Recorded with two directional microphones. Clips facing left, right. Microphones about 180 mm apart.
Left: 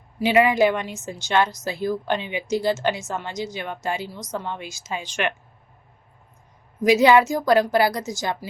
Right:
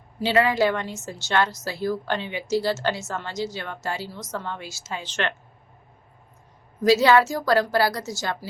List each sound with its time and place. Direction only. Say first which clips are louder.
0.2 s a woman's voice: left 3 dB; 15° left (ahead or behind)
6.8 s a woman's voice: left 2 dB; 15° left (ahead or behind)